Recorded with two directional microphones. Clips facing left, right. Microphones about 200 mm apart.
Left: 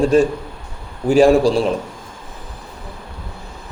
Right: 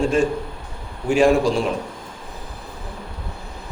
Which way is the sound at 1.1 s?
35° left (ahead or behind).